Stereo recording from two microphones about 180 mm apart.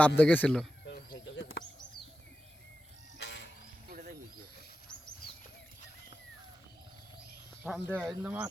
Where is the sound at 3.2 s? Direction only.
75° left (ahead or behind).